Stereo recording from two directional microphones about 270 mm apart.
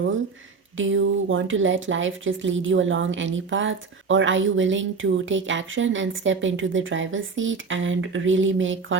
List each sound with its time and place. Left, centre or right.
0.8 s speech: right